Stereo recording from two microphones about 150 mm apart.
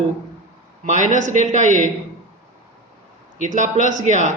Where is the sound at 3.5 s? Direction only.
55° right (ahead or behind).